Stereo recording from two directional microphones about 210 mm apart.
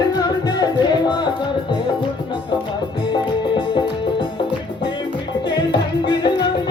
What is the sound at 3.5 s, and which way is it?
Music, 20° left (ahead or behind).